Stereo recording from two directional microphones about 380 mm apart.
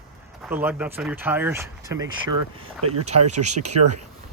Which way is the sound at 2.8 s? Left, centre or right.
Right.